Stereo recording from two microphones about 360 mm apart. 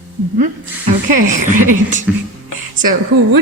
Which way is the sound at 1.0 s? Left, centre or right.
Right.